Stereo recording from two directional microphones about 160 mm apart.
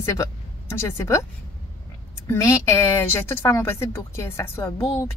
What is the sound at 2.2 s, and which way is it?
A woman's voice, 15° left (ahead or behind).